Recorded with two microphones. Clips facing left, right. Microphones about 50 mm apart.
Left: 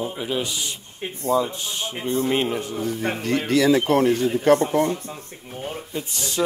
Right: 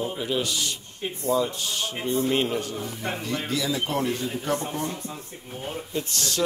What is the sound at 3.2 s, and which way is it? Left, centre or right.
Speech, left.